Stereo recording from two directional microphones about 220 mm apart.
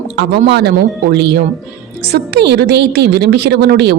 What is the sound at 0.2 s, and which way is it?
A woman's voice, 50° right (ahead or behind).